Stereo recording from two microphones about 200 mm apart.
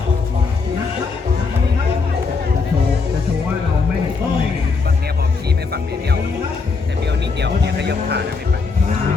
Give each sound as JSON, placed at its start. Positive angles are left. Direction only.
{"t": 7.4, "sound": "vehicle", "side_deg": -55}